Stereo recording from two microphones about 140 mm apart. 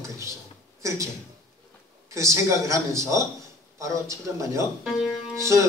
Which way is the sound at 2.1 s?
20° right (ahead or behind).